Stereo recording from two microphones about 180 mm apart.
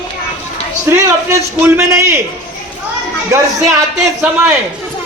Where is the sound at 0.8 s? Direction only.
15° right (ahead or behind).